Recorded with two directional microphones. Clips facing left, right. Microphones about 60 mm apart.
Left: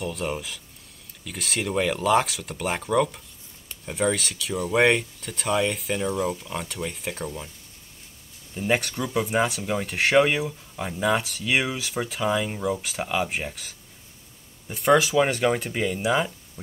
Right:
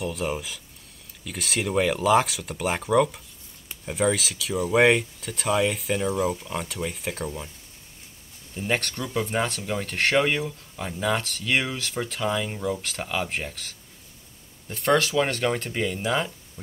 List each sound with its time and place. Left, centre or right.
0.0 s speech: centre
8.5 s speech: centre